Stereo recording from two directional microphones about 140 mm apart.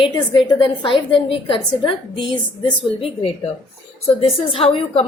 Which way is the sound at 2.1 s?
35° left (ahead or behind).